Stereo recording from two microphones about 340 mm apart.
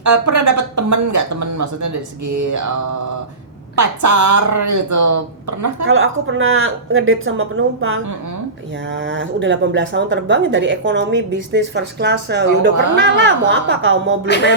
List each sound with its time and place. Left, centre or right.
0.0 s speech: right
5.8 s speech: right